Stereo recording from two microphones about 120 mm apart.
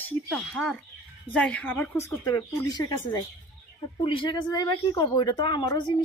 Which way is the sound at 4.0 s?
45° left (ahead or behind).